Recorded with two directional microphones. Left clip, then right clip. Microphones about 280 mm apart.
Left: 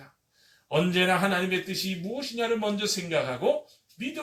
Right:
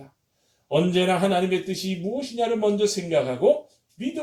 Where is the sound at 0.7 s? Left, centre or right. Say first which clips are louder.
Right 3 dB; centre.